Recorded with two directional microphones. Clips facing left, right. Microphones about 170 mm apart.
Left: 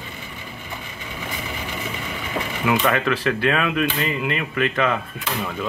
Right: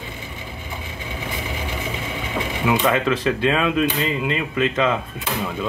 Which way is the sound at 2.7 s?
20° right (ahead or behind).